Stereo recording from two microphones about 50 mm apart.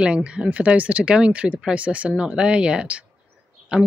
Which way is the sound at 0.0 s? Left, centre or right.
Right.